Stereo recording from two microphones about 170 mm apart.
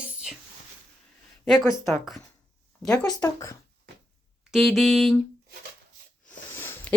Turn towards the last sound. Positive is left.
turn(degrees=15)  # may be behind; listen again after turning